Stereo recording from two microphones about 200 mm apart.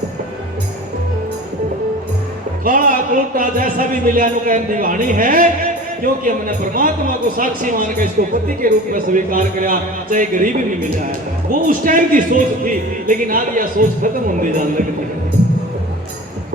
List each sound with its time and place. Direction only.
2.6 s a man's voice: 45° right (ahead or behind)